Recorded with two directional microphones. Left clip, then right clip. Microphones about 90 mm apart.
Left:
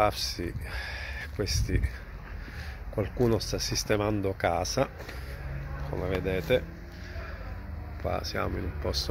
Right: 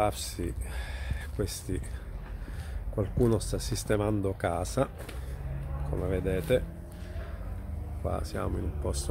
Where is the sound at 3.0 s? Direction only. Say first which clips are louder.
Left 1 dB; 10° right (ahead or behind).